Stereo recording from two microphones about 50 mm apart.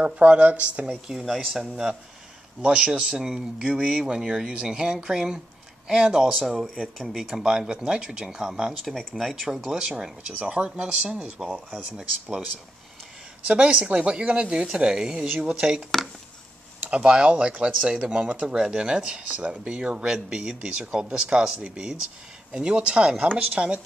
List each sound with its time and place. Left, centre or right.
0.0 s speech: right
1.0 s speech: centre
8.9 s speech: centre
11.4 s speech: centre
11.7 s speech: centre
13.5 s speech: right
16.8 s speech: right